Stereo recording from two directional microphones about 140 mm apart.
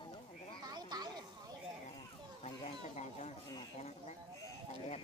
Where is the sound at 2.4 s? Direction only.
50° left (ahead or behind).